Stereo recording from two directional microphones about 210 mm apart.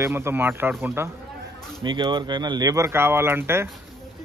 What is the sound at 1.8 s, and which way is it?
Speech, 20° right (ahead or behind).